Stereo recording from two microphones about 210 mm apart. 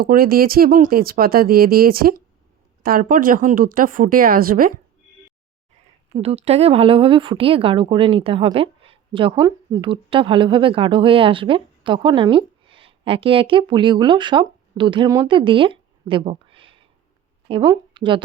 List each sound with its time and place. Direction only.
0.0 s a woman's voice: 45° right (ahead or behind)
6.1 s speech: 30° right (ahead or behind)